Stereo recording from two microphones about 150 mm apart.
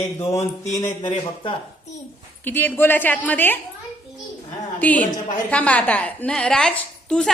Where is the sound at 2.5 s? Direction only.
15° left (ahead or behind).